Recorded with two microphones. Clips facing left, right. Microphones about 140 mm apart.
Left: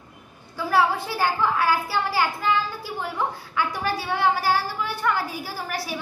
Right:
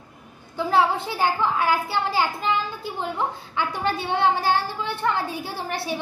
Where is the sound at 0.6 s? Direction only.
20° right (ahead or behind).